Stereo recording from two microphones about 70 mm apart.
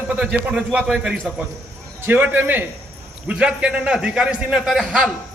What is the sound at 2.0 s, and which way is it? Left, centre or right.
Speech, right.